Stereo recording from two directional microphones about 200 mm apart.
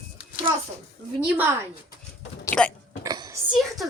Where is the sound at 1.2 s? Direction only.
10° right (ahead or behind).